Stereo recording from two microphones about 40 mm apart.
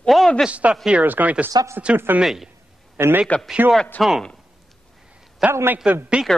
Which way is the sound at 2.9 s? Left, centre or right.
Right.